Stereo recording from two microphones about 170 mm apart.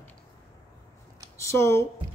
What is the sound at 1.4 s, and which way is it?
Speech, 15° left (ahead or behind).